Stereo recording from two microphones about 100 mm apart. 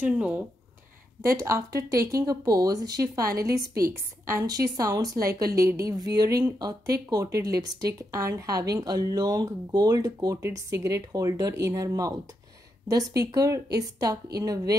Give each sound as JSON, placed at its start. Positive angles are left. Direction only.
{"t": 0.0, "sound": "speech", "side_deg": -15}
{"t": 1.2, "sound": "speech", "side_deg": -30}